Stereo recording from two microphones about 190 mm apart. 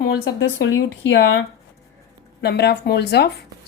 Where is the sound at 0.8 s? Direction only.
70° left (ahead or behind).